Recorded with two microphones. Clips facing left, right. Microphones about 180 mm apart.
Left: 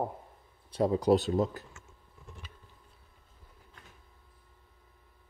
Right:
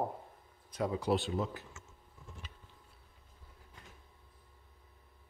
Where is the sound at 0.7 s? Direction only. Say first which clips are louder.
Left 7 dB; 35° left (ahead or behind).